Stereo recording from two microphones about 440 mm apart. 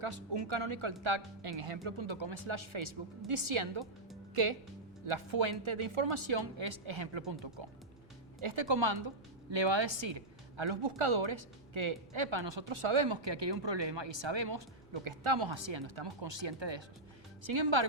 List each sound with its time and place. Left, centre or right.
0.3 s speech: right
5.0 s speech: right
8.4 s speech: right
17.4 s speech: right